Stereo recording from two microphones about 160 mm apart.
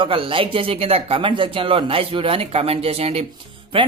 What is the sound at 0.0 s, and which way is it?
Speech, 35° right (ahead or behind).